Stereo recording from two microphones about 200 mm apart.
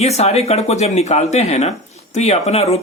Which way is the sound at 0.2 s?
30° left (ahead or behind).